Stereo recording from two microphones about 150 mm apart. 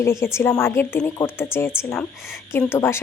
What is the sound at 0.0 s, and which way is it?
A woman's voice, 20° left (ahead or behind).